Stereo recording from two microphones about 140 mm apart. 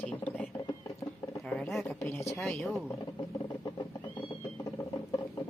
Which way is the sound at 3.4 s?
25° left (ahead or behind).